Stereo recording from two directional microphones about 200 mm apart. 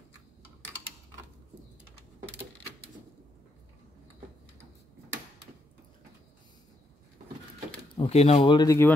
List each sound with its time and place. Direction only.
8.0 s speech: 30° left (ahead or behind); by 8.9 s 15° left (ahead or behind)